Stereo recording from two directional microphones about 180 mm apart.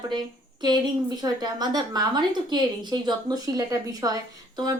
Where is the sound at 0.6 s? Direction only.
25° right (ahead or behind).